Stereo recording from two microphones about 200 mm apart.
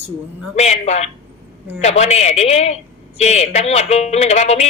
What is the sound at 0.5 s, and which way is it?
Speech, 35° left (ahead or behind).